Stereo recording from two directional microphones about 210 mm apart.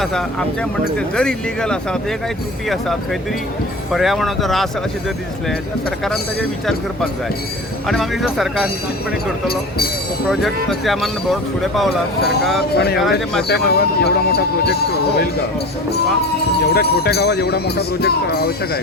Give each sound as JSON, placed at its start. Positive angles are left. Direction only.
{"t": 0.0, "sound": "speech", "side_deg": 5}
{"t": 7.9, "sound": "speech", "side_deg": 0}
{"t": 9.5, "sound": "speech", "side_deg": 45}
{"t": 10.2, "sound": "speech", "side_deg": 0}
{"t": 12.7, "sound": "speech", "side_deg": 50}
{"t": 13.0, "sound": "speech", "side_deg": 0}
{"t": 13.5, "sound": "speech", "side_deg": 50}
{"t": 16.7, "sound": "speech", "side_deg": 50}